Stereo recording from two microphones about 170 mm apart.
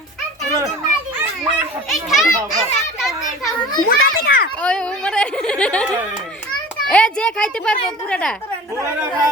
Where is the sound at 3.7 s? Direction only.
60° left (ahead or behind).